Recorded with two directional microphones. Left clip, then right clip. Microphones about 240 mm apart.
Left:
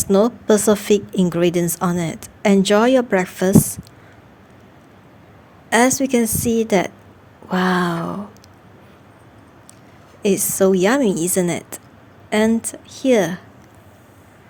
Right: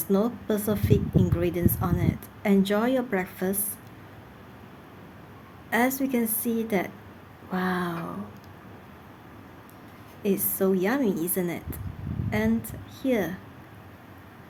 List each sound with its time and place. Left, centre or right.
0.0 s a woman's voice: left
5.7 s a woman's voice: left
10.2 s a woman's voice: left